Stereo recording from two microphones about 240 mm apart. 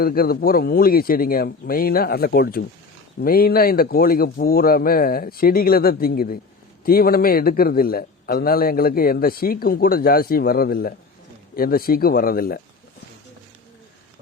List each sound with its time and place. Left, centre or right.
0.0 s a man's voice: left